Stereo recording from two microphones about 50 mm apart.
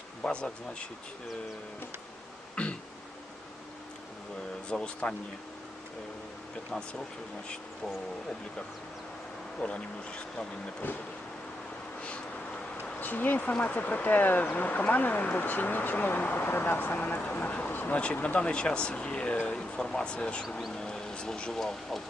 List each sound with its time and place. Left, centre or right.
0.2 s speech: centre
2.6 s throat clearing: left
4.7 s speech: left
9.6 s speech: left
11.9 s a sound: left
12.8 s bee: left
13.7 s speech: left
17.9 s speech: left; by 22.0 s centre